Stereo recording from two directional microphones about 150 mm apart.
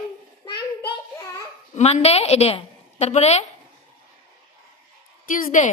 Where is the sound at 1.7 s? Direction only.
45° left (ahead or behind).